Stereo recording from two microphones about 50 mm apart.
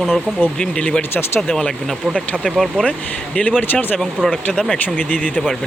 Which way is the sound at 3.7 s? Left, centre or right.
Left.